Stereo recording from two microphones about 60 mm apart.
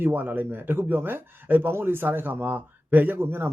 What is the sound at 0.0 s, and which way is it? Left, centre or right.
Speech, right.